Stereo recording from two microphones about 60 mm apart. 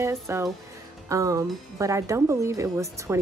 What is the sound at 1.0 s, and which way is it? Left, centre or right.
Speech, right.